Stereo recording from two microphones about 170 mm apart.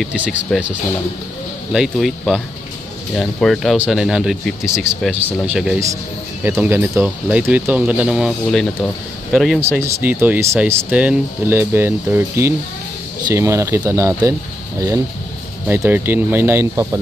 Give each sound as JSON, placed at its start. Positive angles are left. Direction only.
{"t": 0.0, "sound": "speech", "side_deg": -5}
{"t": 9.6, "sound": "speech", "side_deg": -15}
{"t": 15.6, "sound": "speech", "side_deg": -10}